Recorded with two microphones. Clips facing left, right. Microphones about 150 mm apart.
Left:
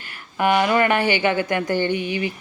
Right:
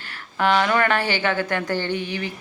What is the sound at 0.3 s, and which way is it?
Speech, 10° left (ahead or behind).